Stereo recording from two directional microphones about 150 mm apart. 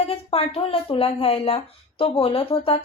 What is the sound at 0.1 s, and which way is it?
Speech, 40° left (ahead or behind).